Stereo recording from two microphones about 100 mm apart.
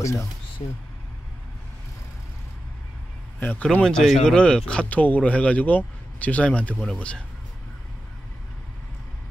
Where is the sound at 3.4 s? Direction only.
15° left (ahead or behind).